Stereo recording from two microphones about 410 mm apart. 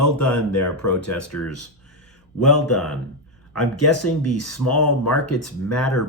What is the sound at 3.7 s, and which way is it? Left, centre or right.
Speech, left.